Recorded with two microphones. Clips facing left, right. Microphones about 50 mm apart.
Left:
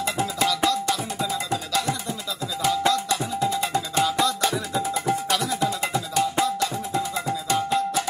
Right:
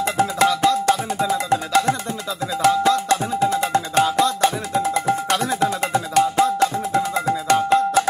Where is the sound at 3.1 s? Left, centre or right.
Right.